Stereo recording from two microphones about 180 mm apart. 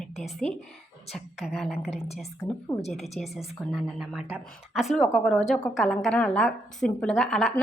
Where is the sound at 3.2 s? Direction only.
5° left (ahead or behind).